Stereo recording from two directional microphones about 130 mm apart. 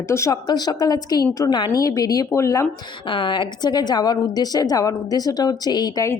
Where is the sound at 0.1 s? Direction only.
25° left (ahead or behind).